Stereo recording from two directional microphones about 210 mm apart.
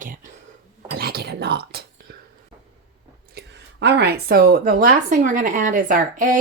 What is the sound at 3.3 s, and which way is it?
Speech, 50° right (ahead or behind).